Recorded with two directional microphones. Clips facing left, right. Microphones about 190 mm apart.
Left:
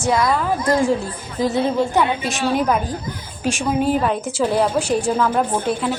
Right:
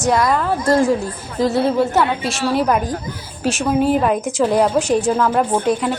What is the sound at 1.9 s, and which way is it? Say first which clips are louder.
Speech: right 1 dB; 15° left (ahead or behind).